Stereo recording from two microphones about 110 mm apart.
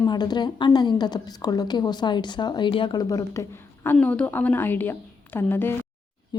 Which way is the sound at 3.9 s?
10° left (ahead or behind).